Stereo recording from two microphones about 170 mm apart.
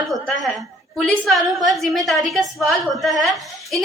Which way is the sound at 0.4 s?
Centre (ahead or behind).